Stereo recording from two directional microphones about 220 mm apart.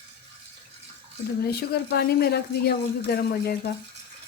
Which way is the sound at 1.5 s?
45° left (ahead or behind).